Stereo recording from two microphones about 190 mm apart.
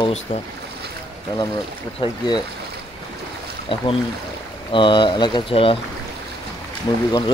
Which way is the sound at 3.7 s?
25° left (ahead or behind).